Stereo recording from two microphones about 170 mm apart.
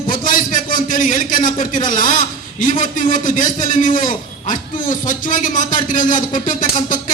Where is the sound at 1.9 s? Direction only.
50° left (ahead or behind).